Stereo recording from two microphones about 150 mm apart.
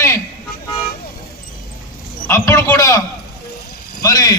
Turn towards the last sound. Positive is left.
turn(degrees=25)  # may be behind; listen again after turning